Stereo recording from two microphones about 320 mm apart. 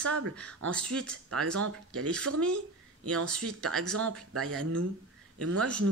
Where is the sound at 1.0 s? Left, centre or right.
Right.